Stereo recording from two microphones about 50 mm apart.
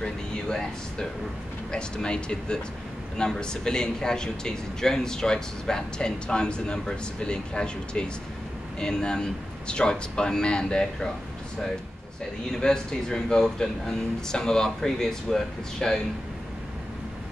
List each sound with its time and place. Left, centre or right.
0.0 s a man's voice: centre
12.5 s a man's voice: centre